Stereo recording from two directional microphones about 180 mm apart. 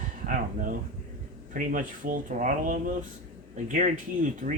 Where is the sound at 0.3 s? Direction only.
50° right (ahead or behind).